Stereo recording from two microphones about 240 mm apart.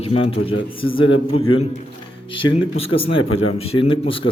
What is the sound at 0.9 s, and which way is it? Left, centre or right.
Speech, left.